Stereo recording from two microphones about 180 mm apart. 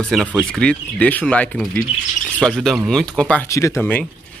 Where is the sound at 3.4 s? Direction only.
15° left (ahead or behind).